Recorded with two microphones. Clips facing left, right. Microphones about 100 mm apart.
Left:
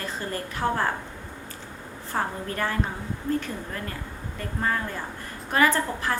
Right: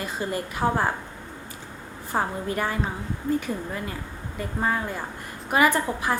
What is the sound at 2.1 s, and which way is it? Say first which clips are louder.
A woman's voice: right 3 dB; 15° right (ahead or behind).